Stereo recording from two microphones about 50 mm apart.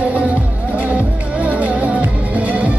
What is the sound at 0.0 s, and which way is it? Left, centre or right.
Music, right.